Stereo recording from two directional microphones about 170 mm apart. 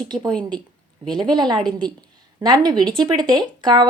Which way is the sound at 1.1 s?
25° right (ahead or behind).